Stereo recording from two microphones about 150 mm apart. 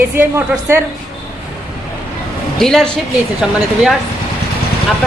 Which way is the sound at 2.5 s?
5° left (ahead or behind).